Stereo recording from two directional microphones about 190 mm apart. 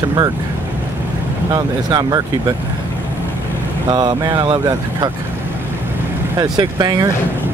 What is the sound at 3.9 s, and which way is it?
Speech, 20° right (ahead or behind).